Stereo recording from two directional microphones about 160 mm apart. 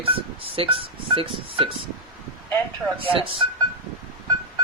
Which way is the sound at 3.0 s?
35° right (ahead or behind).